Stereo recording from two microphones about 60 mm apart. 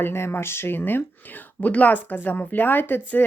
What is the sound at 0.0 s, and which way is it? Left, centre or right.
Speech, left.